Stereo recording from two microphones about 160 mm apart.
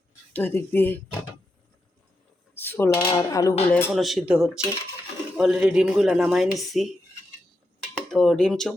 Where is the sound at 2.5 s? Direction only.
15° left (ahead or behind).